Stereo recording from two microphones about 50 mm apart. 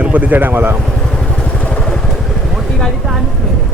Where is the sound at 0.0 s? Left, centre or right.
Right.